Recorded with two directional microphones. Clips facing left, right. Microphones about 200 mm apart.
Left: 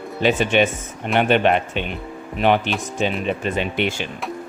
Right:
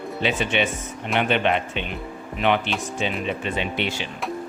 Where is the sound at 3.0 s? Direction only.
45° left (ahead or behind).